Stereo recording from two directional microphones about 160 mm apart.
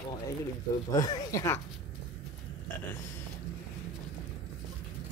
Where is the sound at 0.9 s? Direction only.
25° left (ahead or behind).